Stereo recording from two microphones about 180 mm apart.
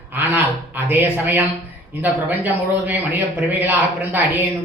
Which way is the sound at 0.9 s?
10° right (ahead or behind).